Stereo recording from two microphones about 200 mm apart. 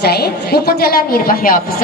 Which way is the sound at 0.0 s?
55° left (ahead or behind).